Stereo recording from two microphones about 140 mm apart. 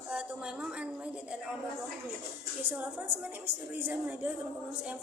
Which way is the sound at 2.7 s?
10° right (ahead or behind).